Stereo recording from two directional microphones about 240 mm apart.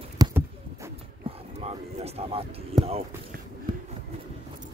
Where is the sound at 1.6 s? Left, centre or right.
Right.